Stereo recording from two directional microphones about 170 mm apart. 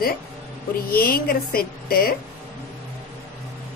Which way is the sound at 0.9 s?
60° left (ahead or behind).